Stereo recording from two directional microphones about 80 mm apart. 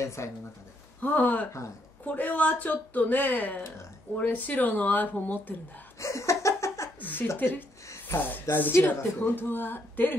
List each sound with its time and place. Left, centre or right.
0.0 s speech: left
1.0 s speech: left
5.9 s laughter: left
7.0 s chuckle: left
7.3 s speech: left